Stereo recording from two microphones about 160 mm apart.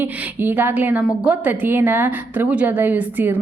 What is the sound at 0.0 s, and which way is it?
A woman's voice, 10° right (ahead or behind).